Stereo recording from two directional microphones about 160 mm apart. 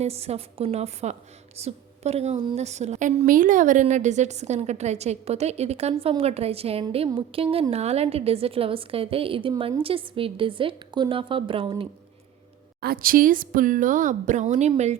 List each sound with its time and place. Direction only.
0.0 s a woman's voice: 40° right (ahead or behind)
12.8 s speech: 65° right (ahead or behind); by 14.7 s 45° right (ahead or behind)